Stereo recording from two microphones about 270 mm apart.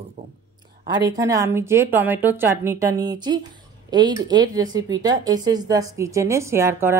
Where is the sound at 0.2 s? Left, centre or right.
Centre.